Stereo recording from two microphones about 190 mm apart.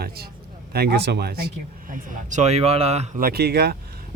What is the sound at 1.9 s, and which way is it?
A man's voice, 40° right (ahead or behind).